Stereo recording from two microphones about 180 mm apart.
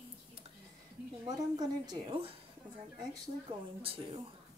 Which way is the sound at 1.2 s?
20° right (ahead or behind).